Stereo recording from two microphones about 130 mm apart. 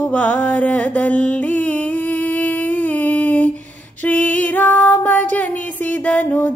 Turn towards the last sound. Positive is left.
turn(degrees=10)  # may be behind; listen again after turning